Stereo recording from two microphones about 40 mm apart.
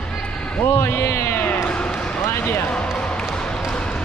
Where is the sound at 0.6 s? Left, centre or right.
Left.